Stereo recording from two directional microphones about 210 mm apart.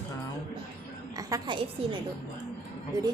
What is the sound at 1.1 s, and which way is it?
Speech, 20° right (ahead or behind).